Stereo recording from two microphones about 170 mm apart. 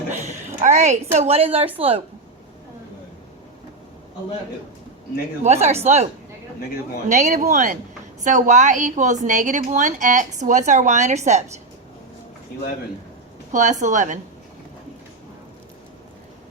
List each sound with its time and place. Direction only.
0.3 s a woman's voice: 45° right (ahead or behind)
5.4 s speech: 40° right (ahead or behind)
7.1 s a woman's voice: 45° right (ahead or behind)
13.5 s a woman's voice: 45° right (ahead or behind)